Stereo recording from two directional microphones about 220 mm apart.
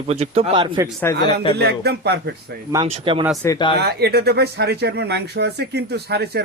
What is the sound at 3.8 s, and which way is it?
Speech, 45° right (ahead or behind).